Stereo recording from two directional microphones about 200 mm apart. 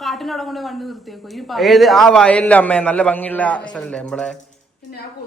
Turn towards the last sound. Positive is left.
turn(degrees=5)  # may be behind; listen again after turning